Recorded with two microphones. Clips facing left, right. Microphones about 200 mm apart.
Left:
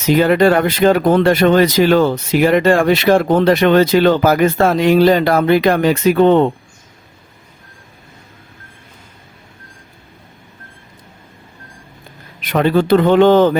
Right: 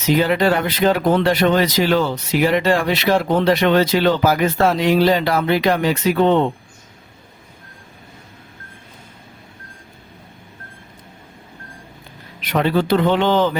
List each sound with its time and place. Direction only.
0.0 s speech: 50° left (ahead or behind)
12.4 s speech: 50° left (ahead or behind)